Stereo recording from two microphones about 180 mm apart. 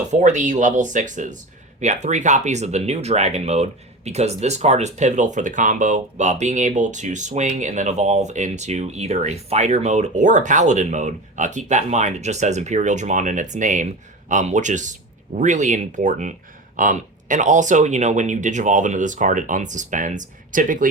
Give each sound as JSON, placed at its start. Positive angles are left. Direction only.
{"t": 0.1, "sound": "speech", "side_deg": -40}